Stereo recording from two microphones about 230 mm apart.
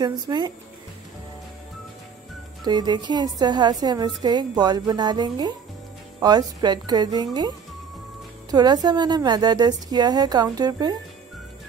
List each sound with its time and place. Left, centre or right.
0.0 s speech: centre
2.6 s a woman's voice: centre